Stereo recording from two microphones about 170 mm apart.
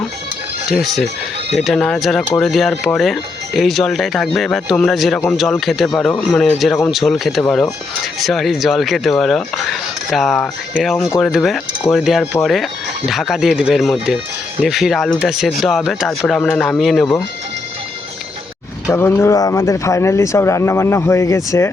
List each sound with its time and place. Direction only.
0.7 s speech: centre (ahead or behind)
18.9 s speech: 15° left (ahead or behind)